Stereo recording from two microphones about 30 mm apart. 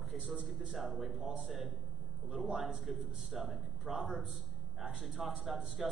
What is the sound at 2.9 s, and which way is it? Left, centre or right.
Speech, centre.